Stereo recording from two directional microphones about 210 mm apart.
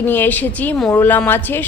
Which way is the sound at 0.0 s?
10° left (ahead or behind).